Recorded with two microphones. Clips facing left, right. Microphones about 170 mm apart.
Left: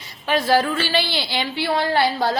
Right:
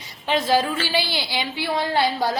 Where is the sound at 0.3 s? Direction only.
20° right (ahead or behind).